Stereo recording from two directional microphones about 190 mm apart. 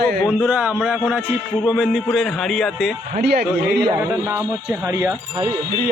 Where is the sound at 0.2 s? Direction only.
5° left (ahead or behind).